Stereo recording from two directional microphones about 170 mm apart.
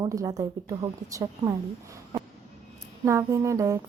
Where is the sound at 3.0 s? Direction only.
15° right (ahead or behind).